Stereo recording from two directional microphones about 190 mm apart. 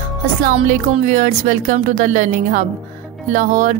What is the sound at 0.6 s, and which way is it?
A woman's voice, 35° right (ahead or behind).